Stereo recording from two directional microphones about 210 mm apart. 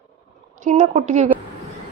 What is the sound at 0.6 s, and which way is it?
Speech, 35° right (ahead or behind).